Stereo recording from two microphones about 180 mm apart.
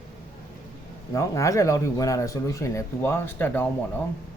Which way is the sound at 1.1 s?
15° left (ahead or behind).